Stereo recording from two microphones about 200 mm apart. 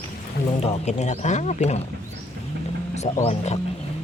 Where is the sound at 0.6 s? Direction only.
30° left (ahead or behind).